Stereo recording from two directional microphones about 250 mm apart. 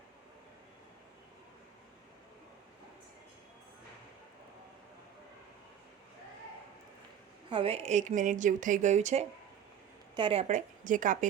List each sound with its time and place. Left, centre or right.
7.5 s a woman's voice: right